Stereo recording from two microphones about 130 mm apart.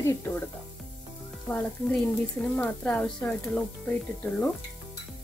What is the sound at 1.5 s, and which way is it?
Speech, 10° left (ahead or behind).